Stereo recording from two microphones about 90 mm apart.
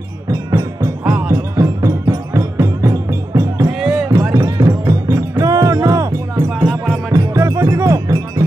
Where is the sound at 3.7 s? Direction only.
10° right (ahead or behind).